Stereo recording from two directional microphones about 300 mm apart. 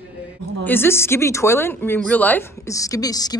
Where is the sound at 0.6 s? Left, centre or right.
Centre.